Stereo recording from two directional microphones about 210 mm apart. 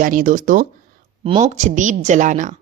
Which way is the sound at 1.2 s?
30° right (ahead or behind).